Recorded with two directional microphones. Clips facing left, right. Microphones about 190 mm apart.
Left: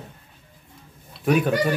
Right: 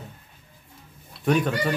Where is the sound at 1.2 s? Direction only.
5° left (ahead or behind).